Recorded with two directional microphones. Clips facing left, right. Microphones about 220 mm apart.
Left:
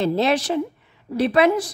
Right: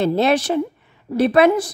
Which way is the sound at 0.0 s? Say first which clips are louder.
Right 3 dB; 55° right (ahead or behind).